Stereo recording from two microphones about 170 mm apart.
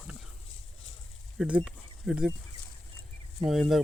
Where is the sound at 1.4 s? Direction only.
5° right (ahead or behind).